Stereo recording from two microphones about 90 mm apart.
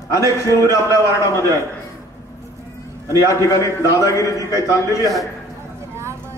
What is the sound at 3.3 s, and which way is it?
A man's voice, 35° left (ahead or behind).